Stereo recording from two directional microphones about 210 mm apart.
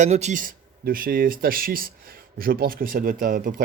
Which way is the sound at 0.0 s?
35° right (ahead or behind).